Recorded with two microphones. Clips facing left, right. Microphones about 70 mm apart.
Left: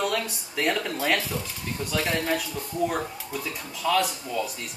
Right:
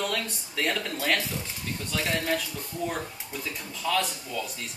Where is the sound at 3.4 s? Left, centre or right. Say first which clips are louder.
Left 3 dB; centre.